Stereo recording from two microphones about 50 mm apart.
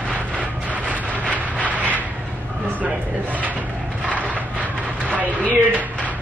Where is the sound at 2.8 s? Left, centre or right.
Right.